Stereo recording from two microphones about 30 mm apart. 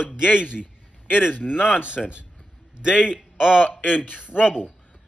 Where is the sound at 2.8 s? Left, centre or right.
Centre.